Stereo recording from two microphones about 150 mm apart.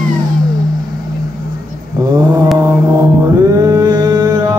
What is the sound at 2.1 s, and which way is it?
Mantra, 25° right (ahead or behind).